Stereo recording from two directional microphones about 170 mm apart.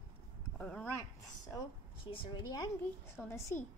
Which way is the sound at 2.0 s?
30° left (ahead or behind).